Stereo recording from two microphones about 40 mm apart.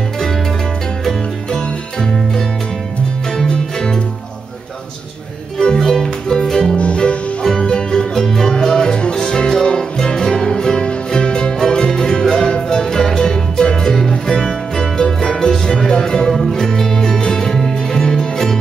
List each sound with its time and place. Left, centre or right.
1.5 s music: centre
5.8 s music: centre
6.8 s music: left; by 18.6 s centre